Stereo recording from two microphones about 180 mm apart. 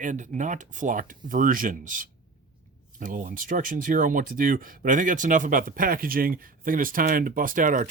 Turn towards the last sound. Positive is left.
turn(degrees=-45)  # may be behind; listen again after turning